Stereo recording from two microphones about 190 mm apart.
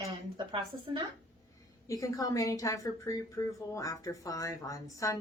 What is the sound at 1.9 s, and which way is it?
Speech, 15° left (ahead or behind).